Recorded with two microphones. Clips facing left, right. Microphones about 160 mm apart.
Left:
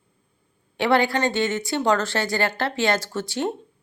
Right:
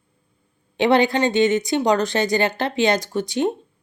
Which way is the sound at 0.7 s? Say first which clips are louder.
Right 3 dB; 20° right (ahead or behind).